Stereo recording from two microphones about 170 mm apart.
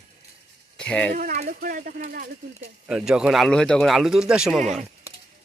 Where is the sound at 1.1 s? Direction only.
50° right (ahead or behind).